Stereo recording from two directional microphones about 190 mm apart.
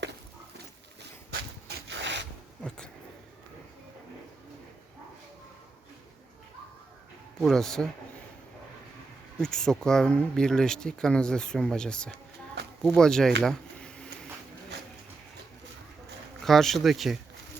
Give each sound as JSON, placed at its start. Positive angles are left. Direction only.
{"t": 1.3, "sound": "rub", "side_deg": -65}
{"t": 2.6, "sound": "a sound", "side_deg": 5}
{"t": 7.3, "sound": "speech", "side_deg": 0}
{"t": 9.4, "sound": "speech", "side_deg": 5}
{"t": 13.4, "sound": "a sound", "side_deg": 5}
{"t": 16.4, "sound": "speech", "side_deg": 0}